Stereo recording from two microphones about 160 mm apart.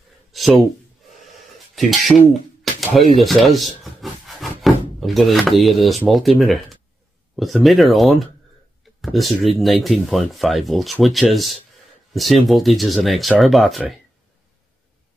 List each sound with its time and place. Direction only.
0.3 s a sound: centre (ahead or behind)
1.8 s speech: centre (ahead or behind)
2.6 s pigeon: centre (ahead or behind)
3.2 s speech: centre (ahead or behind)